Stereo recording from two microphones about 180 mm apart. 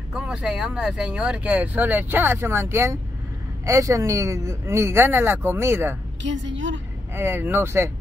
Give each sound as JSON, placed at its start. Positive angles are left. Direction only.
{"t": 0.1, "sound": "speech", "side_deg": -5}
{"t": 6.2, "sound": "a woman's voice", "side_deg": -90}
{"t": 7.2, "sound": "speech", "side_deg": -10}